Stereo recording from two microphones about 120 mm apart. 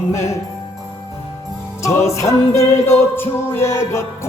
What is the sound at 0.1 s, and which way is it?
Music, 25° left (ahead or behind).